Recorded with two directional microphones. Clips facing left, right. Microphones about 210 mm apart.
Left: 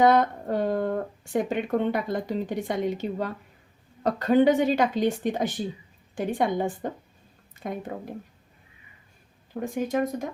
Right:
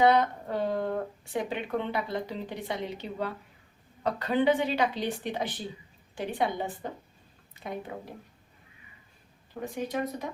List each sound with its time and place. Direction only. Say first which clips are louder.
0.0 s speech: left 3 dB; 50° left (ahead or behind)
7.6 s a sound: left 6 dB; 50° left (ahead or behind)
7.9 s speech: left 4 dB; 50° left (ahead or behind)
9.6 s speech: left 6 dB; 50° left (ahead or behind)